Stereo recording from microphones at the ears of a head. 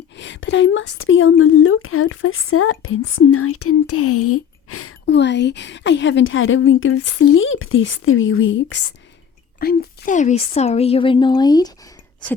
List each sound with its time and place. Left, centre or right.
0.2 s a woman's voice: left